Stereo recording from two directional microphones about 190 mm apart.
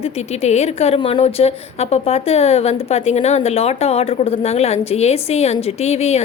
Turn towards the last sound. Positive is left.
turn(degrees=35)  # may be behind; listen again after turning